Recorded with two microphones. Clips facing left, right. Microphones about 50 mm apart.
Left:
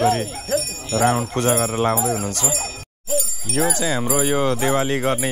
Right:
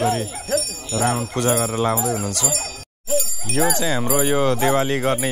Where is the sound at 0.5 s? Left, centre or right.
Left.